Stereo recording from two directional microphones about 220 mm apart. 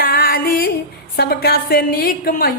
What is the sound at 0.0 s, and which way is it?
Music, 40° left (ahead or behind).